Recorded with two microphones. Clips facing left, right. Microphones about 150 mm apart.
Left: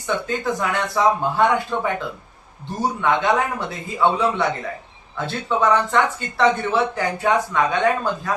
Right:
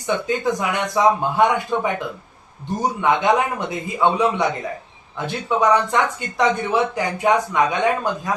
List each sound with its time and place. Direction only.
0.3 s speech: 15° right (ahead or behind)
3.0 s speech: 20° right (ahead or behind)